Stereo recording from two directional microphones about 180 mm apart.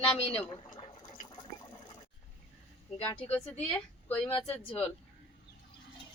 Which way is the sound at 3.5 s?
5° left (ahead or behind).